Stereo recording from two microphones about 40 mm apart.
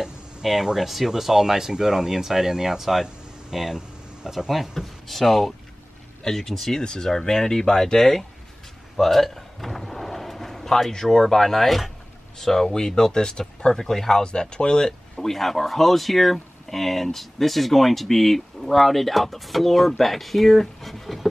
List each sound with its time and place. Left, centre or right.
0.0 s a sound: centre
0.7 s speech: centre
6.8 s speech: centre
8.9 s a sound: centre
11.1 s speech: centre
14.2 s speech: left
15.1 s speech: centre